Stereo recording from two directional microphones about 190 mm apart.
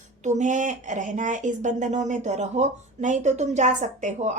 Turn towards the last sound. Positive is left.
turn(degrees=-40)  # may be behind; listen again after turning